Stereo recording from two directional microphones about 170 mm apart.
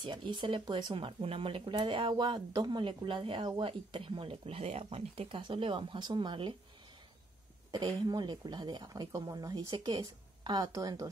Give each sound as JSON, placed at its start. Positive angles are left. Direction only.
{"t": 0.0, "sound": "speech", "side_deg": -25}
{"t": 7.7, "sound": "speech", "side_deg": -25}